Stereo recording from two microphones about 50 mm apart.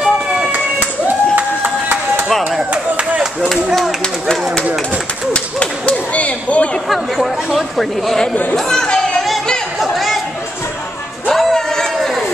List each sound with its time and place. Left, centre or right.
0.5 s a sound: right
2.2 s clapping: centre
2.7 s a sound: right
5.3 s whip: left
6.9 s chatter: centre
8.5 s speech: centre
9.8 s chatter: centre
11.3 s music: centre
11.7 s a sound: centre